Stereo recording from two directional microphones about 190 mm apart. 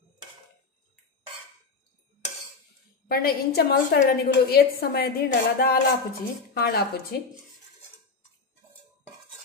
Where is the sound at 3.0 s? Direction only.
55° left (ahead or behind).